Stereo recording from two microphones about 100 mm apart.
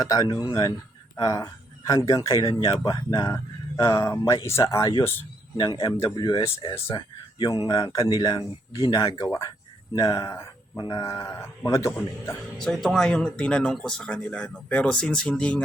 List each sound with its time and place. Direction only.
0.0 s speech: 35° left (ahead or behind)
6.1 s speech: 45° left (ahead or behind)
10.8 s speech: 45° left (ahead or behind)
11.0 s speech: 30° left (ahead or behind)
12.5 s speech: 5° left (ahead or behind)